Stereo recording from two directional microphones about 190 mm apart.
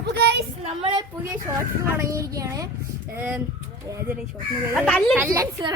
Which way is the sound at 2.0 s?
15° right (ahead or behind).